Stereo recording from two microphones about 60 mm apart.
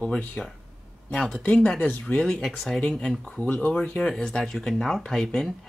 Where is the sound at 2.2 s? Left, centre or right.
Centre.